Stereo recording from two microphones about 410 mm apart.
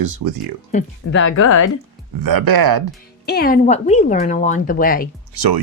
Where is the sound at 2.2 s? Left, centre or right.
Right.